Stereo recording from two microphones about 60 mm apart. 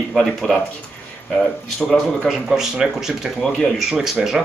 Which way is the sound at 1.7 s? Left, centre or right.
Centre.